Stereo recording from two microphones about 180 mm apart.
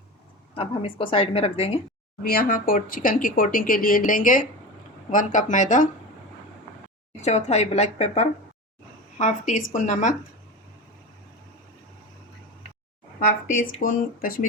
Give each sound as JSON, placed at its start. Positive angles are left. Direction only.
{"t": 0.5, "sound": "a woman's voice", "side_deg": 30}
{"t": 2.2, "sound": "speech", "side_deg": 55}
{"t": 7.2, "sound": "a woman's voice", "side_deg": 40}
{"t": 13.8, "sound": "speech", "side_deg": 50}